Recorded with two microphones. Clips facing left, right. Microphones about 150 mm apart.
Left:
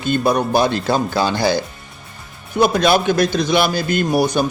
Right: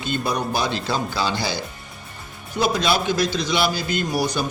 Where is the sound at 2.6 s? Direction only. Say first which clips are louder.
Left 6 dB; 55° left (ahead or behind).